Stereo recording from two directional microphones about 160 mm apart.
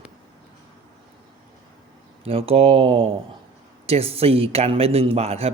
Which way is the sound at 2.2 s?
40° right (ahead or behind).